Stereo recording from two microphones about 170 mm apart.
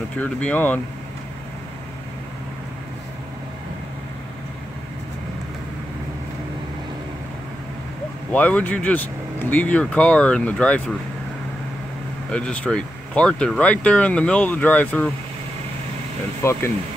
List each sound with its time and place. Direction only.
0.2 s speech: 10° left (ahead or behind)
8.3 s speech: 10° left (ahead or behind)
12.3 s speech: 5° left (ahead or behind)
16.4 s speech: 15° left (ahead or behind)